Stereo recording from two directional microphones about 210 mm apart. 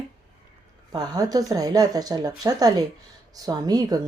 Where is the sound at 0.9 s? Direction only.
20° right (ahead or behind).